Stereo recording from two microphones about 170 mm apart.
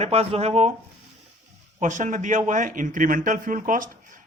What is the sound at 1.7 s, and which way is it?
Speech, 45° right (ahead or behind).